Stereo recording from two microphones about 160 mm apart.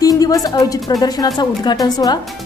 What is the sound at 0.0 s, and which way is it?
A woman's voice, 25° left (ahead or behind).